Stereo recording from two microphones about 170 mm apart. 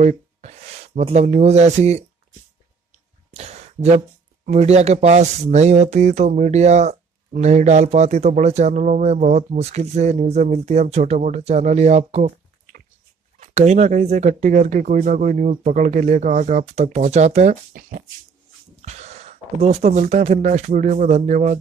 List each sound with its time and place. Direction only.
0.0 s speech: 40° right (ahead or behind)
3.3 s a sound: 40° right (ahead or behind)
4.5 s speech: 40° right (ahead or behind)
18.8 s speech: 40° right (ahead or behind)